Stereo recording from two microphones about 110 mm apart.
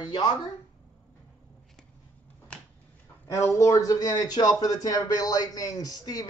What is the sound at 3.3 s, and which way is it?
Speech, 25° left (ahead or behind).